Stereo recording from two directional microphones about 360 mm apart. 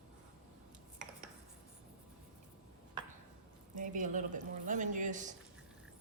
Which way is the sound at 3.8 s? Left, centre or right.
Right.